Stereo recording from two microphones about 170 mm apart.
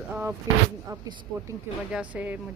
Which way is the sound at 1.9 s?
5° right (ahead or behind).